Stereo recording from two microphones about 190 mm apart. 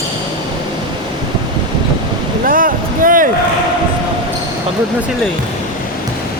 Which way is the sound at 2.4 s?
45° right (ahead or behind).